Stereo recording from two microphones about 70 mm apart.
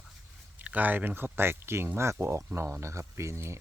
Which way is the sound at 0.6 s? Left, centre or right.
Right.